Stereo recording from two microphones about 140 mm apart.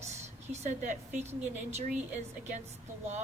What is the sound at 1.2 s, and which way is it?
Speech, 15° right (ahead or behind).